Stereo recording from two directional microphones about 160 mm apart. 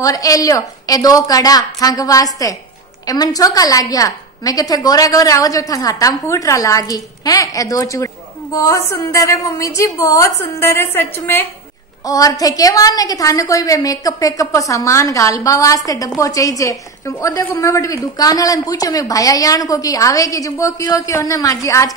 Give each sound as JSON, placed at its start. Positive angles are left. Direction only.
{"t": 0.0, "sound": "a woman's voice", "side_deg": 20}